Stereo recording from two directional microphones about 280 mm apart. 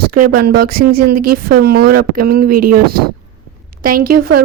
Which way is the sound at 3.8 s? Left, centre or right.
Right.